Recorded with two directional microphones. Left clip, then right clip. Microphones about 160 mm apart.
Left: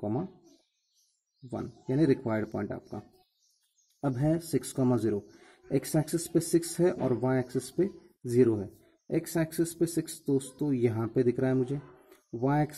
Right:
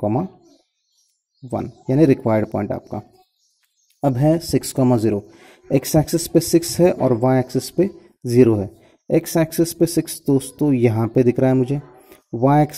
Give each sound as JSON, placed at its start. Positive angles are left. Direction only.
{"t": 0.0, "sound": "a man's voice", "side_deg": -25}
{"t": 1.5, "sound": "a man's voice", "side_deg": -25}
{"t": 4.0, "sound": "a man's voice", "side_deg": -20}